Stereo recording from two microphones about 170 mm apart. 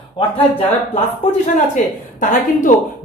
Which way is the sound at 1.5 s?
50° left (ahead or behind).